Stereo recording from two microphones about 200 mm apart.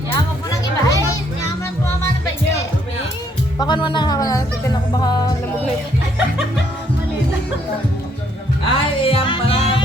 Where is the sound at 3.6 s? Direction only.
25° left (ahead or behind).